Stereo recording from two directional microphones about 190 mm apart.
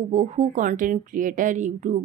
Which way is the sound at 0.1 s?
40° right (ahead or behind).